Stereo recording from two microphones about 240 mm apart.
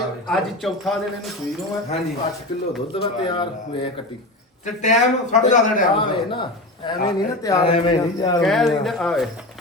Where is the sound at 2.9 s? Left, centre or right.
Left.